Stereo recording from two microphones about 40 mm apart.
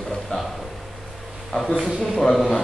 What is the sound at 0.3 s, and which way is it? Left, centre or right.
Speech, left.